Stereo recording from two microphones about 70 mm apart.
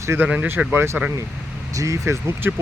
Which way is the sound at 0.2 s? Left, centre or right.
Right.